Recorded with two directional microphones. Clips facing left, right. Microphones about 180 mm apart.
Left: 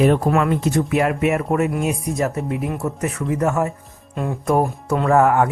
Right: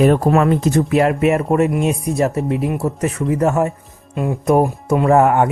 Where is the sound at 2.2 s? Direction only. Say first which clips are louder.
Right 5 dB; 20° right (ahead or behind).